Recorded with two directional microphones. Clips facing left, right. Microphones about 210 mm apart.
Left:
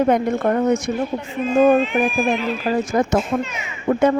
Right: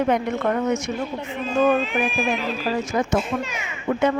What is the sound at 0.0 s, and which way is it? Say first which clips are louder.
A woman's voice: left 4 dB; 40° left (ahead or behind).